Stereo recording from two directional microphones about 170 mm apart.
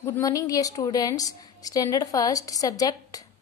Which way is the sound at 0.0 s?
20° left (ahead or behind).